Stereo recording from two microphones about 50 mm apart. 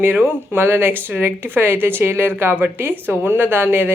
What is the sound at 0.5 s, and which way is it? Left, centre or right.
A woman's voice, right.